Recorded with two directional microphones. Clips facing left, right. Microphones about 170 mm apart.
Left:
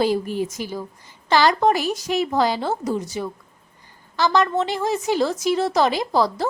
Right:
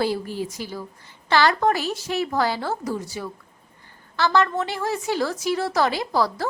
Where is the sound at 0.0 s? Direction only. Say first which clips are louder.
Left 4 dB; 15° left (ahead or behind).